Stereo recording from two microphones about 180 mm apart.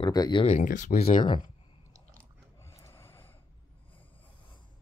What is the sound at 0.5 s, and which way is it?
Speech, 45° left (ahead or behind).